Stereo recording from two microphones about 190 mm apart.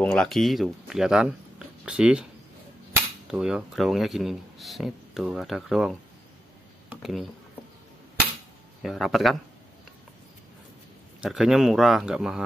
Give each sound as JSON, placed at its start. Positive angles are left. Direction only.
{"t": 0.0, "sound": "speech", "side_deg": 5}
{"t": 3.3, "sound": "speech", "side_deg": -5}
{"t": 6.9, "sound": "a sound", "side_deg": 0}
{"t": 8.8, "sound": "speech", "side_deg": 0}
{"t": 11.1, "sound": "speech", "side_deg": 0}